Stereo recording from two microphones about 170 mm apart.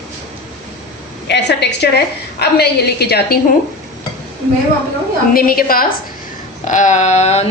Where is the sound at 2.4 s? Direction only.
70° left (ahead or behind).